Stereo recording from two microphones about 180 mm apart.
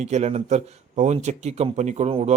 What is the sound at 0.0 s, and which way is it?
Speech, 40° right (ahead or behind).